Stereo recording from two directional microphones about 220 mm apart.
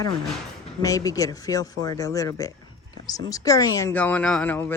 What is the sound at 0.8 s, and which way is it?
Speech, 15° left (ahead or behind).